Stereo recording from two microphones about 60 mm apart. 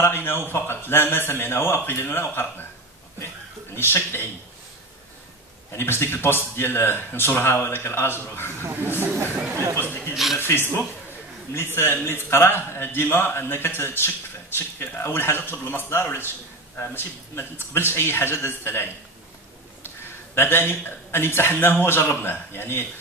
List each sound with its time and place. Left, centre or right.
0.0 s a man's voice: left
3.7 s a man's voice: left
5.8 s a man's voice: left
9.5 s speech: right
10.1 s speech: centre
10.4 s a man's voice: left
20.3 s a man's voice: left